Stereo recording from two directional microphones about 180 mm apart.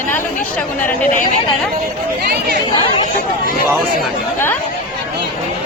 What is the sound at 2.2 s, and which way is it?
Speech, 60° right (ahead or behind).